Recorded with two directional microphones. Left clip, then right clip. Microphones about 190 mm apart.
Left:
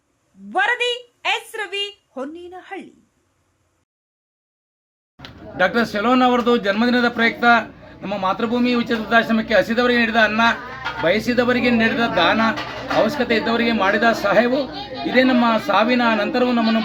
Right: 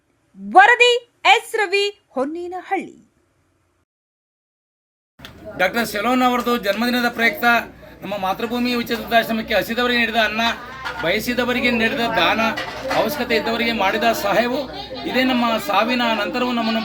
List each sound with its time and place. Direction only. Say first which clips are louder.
0.5 s a woman's voice: right 8 dB; 30° right (ahead or behind)
5.5 s a man's voice: left 1 dB; 40° left (ahead or behind)